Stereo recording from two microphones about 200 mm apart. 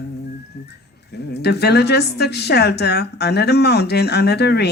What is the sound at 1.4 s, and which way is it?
A woman's voice, 55° left (ahead or behind).